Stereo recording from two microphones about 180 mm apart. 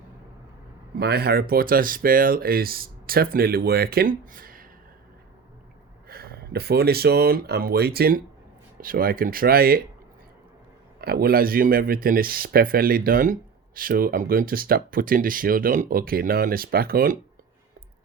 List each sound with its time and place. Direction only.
0.9 s speech: 60° right (ahead or behind)
6.1 s speech: 55° right (ahead or behind)
11.0 s speech: 60° right (ahead or behind)